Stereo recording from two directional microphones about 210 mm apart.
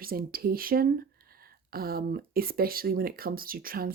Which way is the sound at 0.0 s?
45° right (ahead or behind).